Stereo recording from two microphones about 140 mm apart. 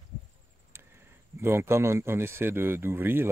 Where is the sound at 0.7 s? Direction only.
15° right (ahead or behind).